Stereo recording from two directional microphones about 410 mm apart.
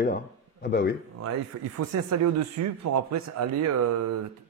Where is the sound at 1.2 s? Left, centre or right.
Right.